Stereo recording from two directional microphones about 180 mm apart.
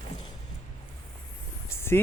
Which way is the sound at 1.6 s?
15° left (ahead or behind).